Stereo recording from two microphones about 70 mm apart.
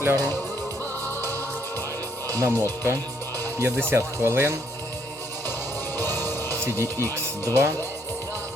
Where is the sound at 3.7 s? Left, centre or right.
Right.